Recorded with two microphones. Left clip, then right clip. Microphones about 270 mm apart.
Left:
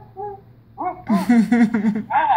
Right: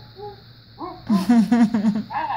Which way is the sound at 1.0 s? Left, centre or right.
Centre.